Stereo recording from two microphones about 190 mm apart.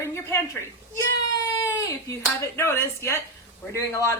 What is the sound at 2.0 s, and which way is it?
A woman's voice, 15° left (ahead or behind).